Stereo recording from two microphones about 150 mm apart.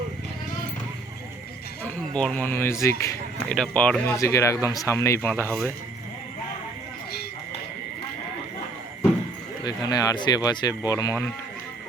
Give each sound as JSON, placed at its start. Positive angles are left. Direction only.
{"t": 2.1, "sound": "speech", "side_deg": 10}
{"t": 3.5, "sound": "speech", "side_deg": 5}
{"t": 9.6, "sound": "speech", "side_deg": 25}